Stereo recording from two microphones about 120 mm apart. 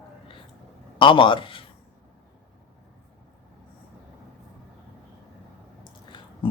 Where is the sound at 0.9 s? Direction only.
45° left (ahead or behind).